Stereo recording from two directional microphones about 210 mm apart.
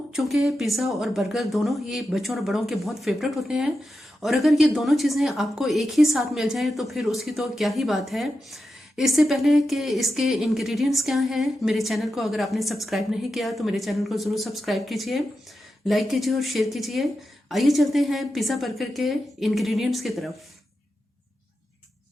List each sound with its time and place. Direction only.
0.1 s a woman's voice: centre (ahead or behind)